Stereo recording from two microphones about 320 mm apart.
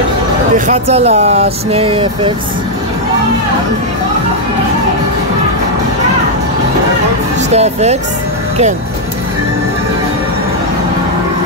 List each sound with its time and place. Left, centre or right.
0.7 s speech: centre
7.5 s speech: centre